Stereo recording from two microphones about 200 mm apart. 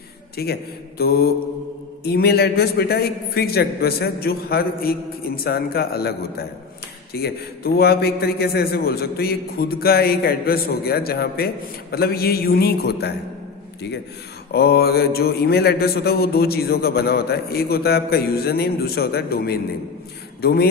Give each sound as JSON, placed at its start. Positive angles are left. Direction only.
{"t": 0.4, "sound": "a man's voice", "side_deg": 50}
{"t": 14.5, "sound": "a man's voice", "side_deg": 50}